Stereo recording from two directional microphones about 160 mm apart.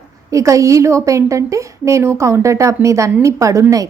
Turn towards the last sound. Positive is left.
turn(degrees=-20)  # may be behind; listen again after turning